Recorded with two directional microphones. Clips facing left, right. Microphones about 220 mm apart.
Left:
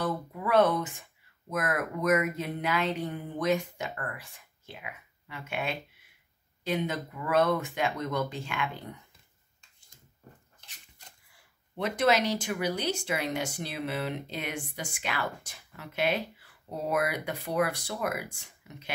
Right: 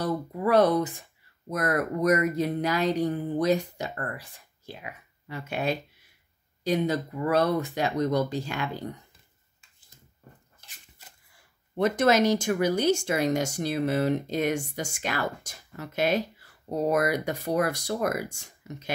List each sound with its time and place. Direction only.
0.0 s speech: 35° right (ahead or behind)
9.6 s a sound: 5° right (ahead or behind)
11.7 s speech: 45° right (ahead or behind)